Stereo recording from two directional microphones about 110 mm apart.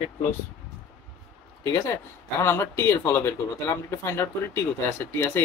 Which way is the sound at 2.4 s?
25° left (ahead or behind).